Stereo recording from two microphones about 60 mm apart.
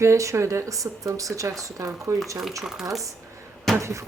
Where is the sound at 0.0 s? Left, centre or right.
Right.